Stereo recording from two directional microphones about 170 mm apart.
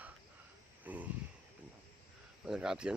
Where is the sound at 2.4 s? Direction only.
5° right (ahead or behind).